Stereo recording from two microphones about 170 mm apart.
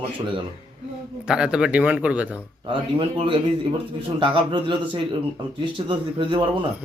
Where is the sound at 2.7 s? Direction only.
30° right (ahead or behind).